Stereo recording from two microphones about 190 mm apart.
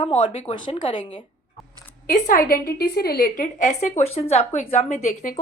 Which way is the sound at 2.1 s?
50° left (ahead or behind).